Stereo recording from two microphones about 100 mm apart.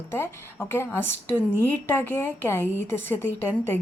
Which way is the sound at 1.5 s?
20° left (ahead or behind).